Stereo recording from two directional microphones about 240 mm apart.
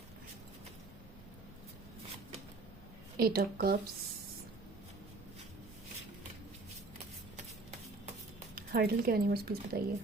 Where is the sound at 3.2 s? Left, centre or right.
Right.